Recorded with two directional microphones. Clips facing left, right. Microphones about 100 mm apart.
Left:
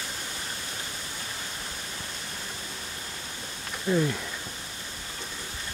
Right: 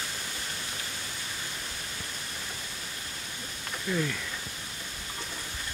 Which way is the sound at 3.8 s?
25° left (ahead or behind).